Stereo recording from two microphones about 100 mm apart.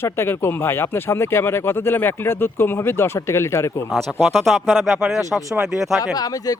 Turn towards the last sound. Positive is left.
turn(degrees=40)  # may be behind; listen again after turning